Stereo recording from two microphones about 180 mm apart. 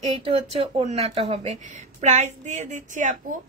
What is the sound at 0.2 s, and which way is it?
A woman's voice, 35° right (ahead or behind).